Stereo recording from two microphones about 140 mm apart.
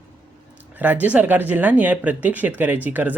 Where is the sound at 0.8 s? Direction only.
10° right (ahead or behind).